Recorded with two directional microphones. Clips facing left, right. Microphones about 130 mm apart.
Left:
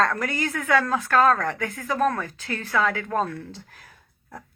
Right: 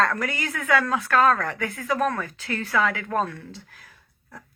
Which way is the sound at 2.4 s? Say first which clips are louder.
Right 2 dB; 35° left (ahead or behind).